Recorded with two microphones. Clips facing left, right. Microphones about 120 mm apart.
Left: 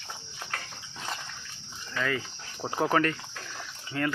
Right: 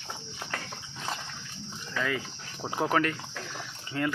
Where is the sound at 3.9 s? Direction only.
20° right (ahead or behind).